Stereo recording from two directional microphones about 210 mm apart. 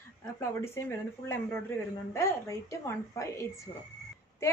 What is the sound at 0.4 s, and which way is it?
A woman's voice, 10° left (ahead or behind).